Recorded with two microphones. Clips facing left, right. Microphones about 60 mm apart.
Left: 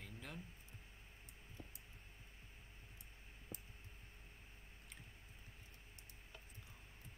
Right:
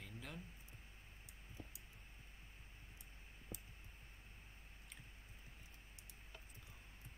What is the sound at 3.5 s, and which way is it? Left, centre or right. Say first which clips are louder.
Clicking: right 1 dB; left.